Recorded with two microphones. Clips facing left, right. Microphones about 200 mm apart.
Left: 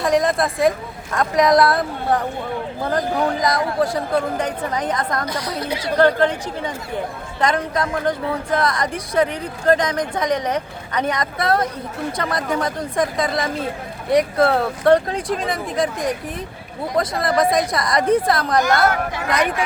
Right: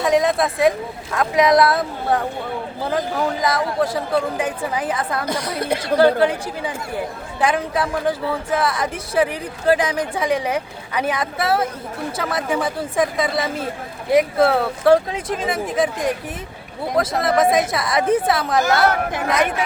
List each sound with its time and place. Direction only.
0.0 s speech: centre (ahead or behind)
3.4 s speech: 5° right (ahead or behind)
5.5 s speech: 55° right (ahead or behind)
6.0 s speech: 10° right (ahead or behind)